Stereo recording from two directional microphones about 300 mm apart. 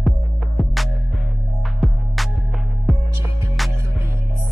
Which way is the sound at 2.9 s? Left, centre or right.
Centre.